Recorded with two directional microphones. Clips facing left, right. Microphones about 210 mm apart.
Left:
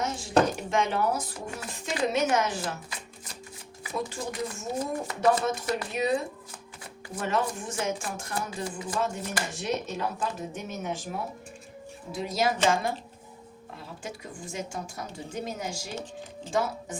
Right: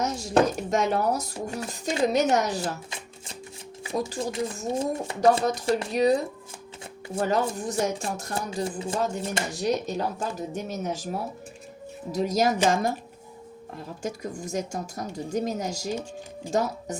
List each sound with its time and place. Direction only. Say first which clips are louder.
0.0 s speech: right 2 dB; 40° right (ahead or behind)
3.8 s speech: right 4 dB; 35° right (ahead or behind)
9.5 s speech: right 5 dB; 40° right (ahead or behind)
14.0 s speech: right 9 dB; 40° right (ahead or behind)